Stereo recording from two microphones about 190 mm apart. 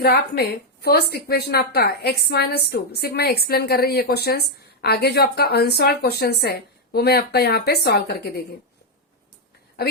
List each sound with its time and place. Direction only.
0.0 s a woman's voice: 55° left (ahead or behind)